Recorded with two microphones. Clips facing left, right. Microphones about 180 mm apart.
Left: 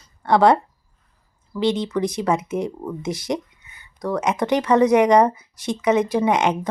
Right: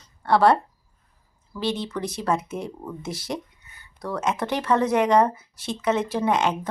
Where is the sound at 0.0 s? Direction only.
15° left (ahead or behind).